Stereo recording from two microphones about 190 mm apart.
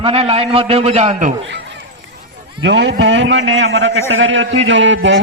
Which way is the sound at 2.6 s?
70° right (ahead or behind).